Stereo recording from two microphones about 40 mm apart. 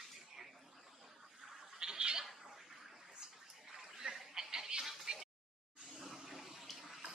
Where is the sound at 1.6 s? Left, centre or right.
Centre.